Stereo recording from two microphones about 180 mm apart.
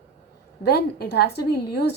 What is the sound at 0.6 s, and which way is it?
A woman's voice, 60° left (ahead or behind).